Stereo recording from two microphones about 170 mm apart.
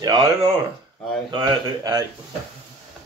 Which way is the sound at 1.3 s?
20° right (ahead or behind).